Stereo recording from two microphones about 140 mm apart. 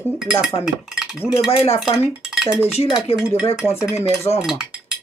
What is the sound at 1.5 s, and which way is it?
Speech, 45° left (ahead or behind).